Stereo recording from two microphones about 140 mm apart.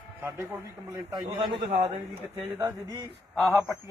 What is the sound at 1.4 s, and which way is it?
Speech, 40° right (ahead or behind).